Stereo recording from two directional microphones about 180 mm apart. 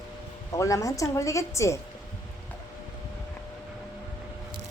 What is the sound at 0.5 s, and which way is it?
A woman's voice, 20° left (ahead or behind).